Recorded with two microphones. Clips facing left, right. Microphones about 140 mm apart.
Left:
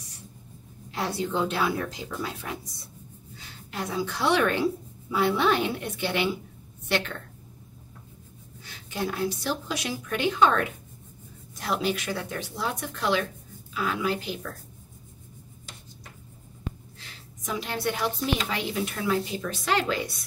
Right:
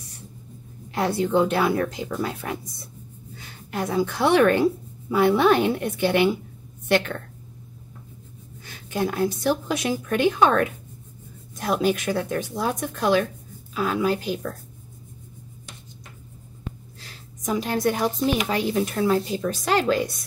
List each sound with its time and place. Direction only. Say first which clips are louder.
0.9 s a woman's voice: right 7 dB; 55° right (ahead or behind)
8.6 s a woman's voice: right 5 dB; 50° right (ahead or behind)
17.0 s a woman's voice: right 8 dB; 40° right (ahead or behind)